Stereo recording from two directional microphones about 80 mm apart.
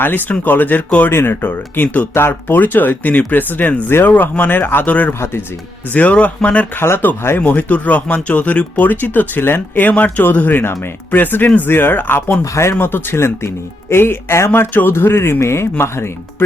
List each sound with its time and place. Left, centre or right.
0.0 s speech: left
6.7 s speech: left